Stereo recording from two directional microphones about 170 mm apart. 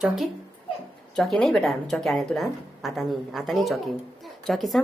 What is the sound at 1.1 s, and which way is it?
A woman's voice, centre (ahead or behind).